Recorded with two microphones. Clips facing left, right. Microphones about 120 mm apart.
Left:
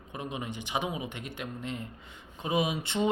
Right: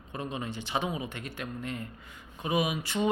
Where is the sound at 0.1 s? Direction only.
15° left (ahead or behind).